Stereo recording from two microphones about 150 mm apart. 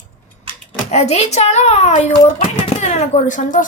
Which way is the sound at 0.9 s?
45° left (ahead or behind).